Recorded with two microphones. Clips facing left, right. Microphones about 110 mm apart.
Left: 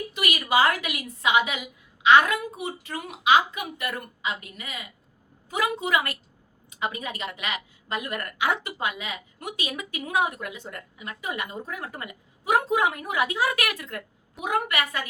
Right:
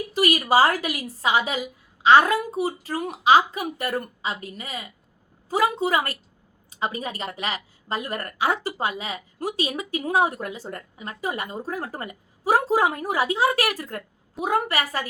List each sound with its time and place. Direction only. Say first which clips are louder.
0.1 s a woman's voice: right 6 dB; 35° right (ahead or behind)